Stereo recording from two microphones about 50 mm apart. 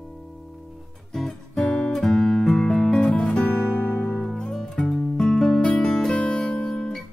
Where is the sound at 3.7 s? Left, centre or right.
Left.